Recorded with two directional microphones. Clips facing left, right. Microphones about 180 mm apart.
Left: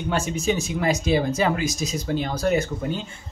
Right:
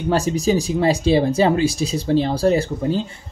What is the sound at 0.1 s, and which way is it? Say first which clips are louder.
Speech: right 6 dB; 35° right (ahead or behind).